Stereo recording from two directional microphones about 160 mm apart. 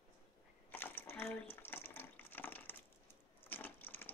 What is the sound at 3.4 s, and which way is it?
Crushing, 15° left (ahead or behind).